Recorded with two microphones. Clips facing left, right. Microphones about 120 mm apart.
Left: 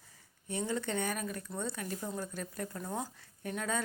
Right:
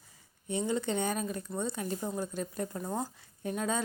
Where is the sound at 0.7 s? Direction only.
20° right (ahead or behind).